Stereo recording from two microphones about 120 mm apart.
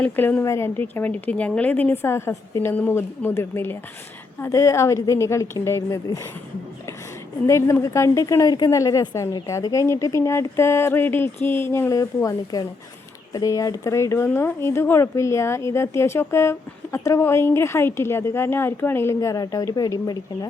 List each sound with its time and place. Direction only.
0.0 s a woman's voice: 15° left (ahead or behind)
7.4 s speech: 25° left (ahead or behind)